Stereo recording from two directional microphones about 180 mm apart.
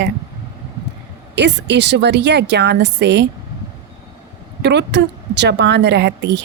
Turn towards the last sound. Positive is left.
turn(degrees=-70)  # may be behind; listen again after turning